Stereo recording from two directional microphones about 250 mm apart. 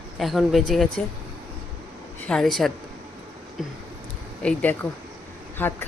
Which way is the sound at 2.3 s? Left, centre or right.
Centre.